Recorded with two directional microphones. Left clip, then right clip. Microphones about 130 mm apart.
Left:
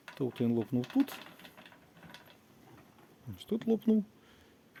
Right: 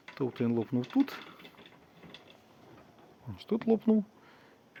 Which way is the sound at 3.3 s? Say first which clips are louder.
Right 3 dB; 10° left (ahead or behind).